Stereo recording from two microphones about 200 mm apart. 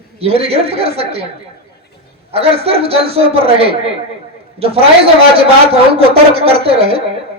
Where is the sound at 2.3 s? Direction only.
30° right (ahead or behind).